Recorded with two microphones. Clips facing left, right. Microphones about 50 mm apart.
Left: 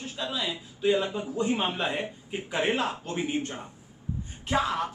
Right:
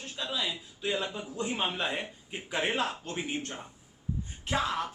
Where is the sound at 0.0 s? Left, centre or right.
Centre.